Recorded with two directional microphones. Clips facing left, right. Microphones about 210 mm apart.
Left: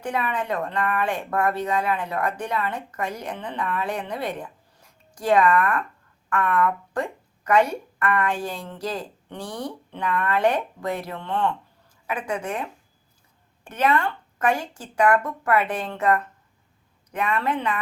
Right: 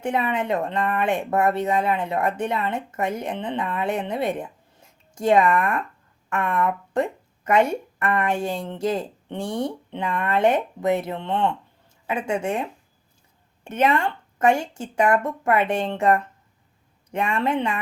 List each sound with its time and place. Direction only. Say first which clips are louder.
0.0 s speech: right 3 dB; 25° right (ahead or behind)
13.7 s speech: right 1 dB; 25° right (ahead or behind)